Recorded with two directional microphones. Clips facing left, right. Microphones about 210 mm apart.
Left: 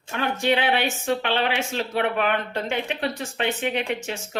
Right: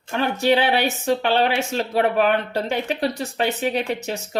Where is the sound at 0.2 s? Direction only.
40° right (ahead or behind).